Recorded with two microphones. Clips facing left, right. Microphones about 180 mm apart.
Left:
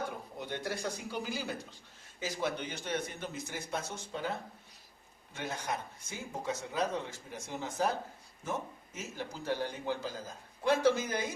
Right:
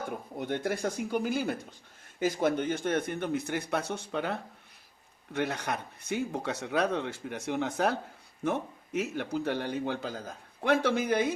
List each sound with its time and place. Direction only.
0.3 s speech: 55° right (ahead or behind)